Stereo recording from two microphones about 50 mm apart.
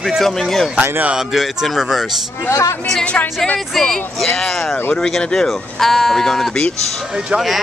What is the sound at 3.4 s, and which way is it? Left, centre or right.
Speech, centre.